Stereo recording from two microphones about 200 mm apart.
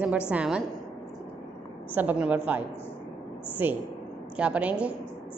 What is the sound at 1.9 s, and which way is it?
A woman's voice, 10° right (ahead or behind).